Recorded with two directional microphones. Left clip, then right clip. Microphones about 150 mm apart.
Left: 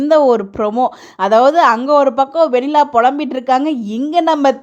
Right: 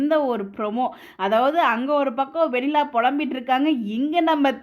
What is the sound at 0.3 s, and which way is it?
Speech, 35° left (ahead or behind).